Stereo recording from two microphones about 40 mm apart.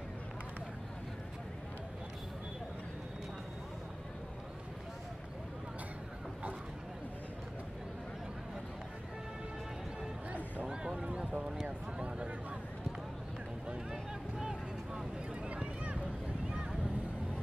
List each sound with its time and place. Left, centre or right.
11.0 s clip-clop: right
11.6 s a sound: right
14.4 s vehicle: centre
15.4 s boat: right